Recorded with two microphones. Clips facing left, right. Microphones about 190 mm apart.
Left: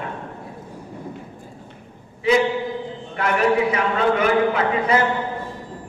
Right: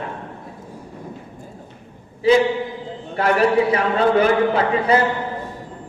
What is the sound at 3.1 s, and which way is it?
A man's voice, 30° right (ahead or behind).